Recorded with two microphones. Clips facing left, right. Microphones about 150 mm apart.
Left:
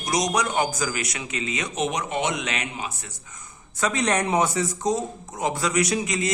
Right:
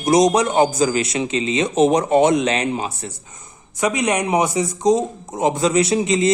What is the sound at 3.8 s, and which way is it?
A man's voice, 15° right (ahead or behind).